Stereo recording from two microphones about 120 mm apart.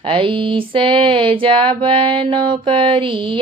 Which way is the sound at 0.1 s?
45° right (ahead or behind).